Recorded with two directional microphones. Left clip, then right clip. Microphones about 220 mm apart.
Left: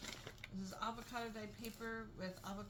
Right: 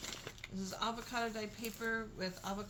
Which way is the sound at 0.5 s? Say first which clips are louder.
Right 6 dB; 40° right (ahead or behind).